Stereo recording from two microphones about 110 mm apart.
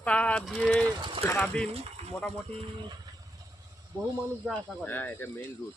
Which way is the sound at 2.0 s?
70° right (ahead or behind).